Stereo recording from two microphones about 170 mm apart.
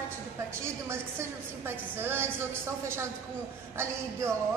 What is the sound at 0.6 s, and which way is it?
A woman's voice, 15° right (ahead or behind).